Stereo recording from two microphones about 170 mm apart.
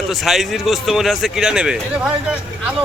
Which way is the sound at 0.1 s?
Centre (ahead or behind).